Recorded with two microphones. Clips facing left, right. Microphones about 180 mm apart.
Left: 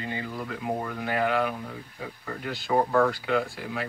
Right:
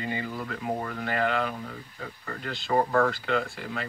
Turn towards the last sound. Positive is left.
turn(degrees=5)  # may be behind; listen again after turning